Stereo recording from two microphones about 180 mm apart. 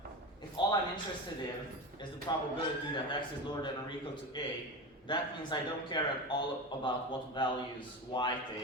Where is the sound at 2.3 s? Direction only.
25° left (ahead or behind).